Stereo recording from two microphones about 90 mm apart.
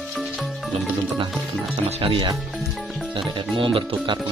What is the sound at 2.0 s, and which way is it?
Speech, 80° right.